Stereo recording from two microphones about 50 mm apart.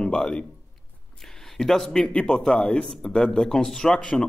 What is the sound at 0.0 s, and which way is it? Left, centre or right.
Speech, centre.